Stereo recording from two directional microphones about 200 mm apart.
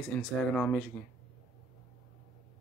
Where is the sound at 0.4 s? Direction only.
5° left (ahead or behind).